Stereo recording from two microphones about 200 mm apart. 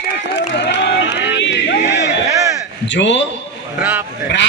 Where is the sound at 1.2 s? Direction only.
65° left (ahead or behind).